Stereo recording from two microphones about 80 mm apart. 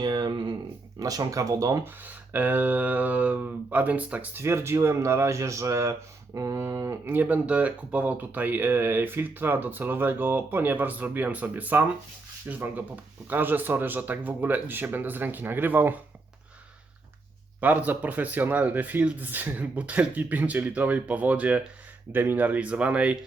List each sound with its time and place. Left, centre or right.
0.0 s a sound: right
0.9 s speech: right
1.8 s speech: right
4.4 s speech: right
17.6 s speech: right